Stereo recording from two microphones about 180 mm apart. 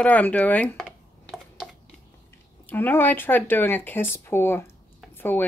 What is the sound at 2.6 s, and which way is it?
Speech, 10° left (ahead or behind).